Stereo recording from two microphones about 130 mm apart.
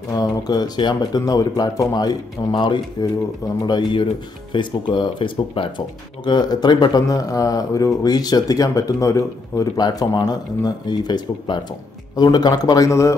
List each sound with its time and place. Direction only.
0.2 s speech: 30° left (ahead or behind)